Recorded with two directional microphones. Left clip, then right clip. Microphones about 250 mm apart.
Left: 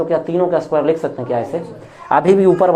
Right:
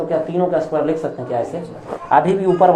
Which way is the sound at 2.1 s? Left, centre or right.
Left.